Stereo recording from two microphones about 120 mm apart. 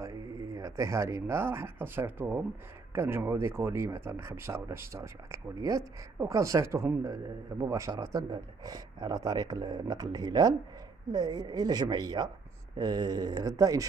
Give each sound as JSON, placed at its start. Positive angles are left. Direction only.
{"t": 0.6, "sound": "speech", "side_deg": -25}